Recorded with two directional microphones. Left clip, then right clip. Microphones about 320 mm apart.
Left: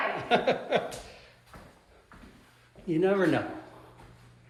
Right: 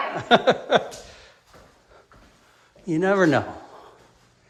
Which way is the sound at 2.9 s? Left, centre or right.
Right.